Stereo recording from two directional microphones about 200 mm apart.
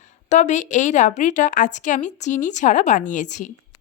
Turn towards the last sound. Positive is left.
turn(degrees=35)  # may be behind; listen again after turning